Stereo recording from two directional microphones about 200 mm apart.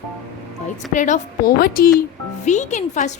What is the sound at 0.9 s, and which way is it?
Speech, 40° left (ahead or behind).